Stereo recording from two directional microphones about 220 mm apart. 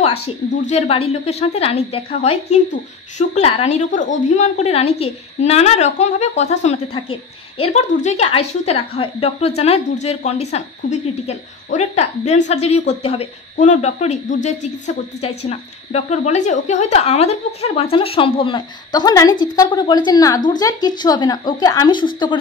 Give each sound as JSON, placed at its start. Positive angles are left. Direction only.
{"t": 0.7, "sound": "a woman's voice", "side_deg": 30}